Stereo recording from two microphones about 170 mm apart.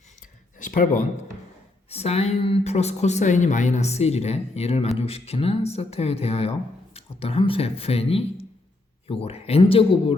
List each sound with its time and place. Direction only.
0.6 s speech: 50° left (ahead or behind)
1.9 s speech: 40° left (ahead or behind)